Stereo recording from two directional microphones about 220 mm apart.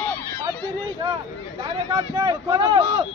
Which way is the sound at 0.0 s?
10° left (ahead or behind).